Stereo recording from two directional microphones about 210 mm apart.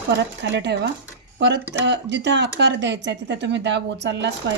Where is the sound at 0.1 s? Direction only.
60° right (ahead or behind).